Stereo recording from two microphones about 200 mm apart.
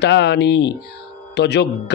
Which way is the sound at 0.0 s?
60° left (ahead or behind).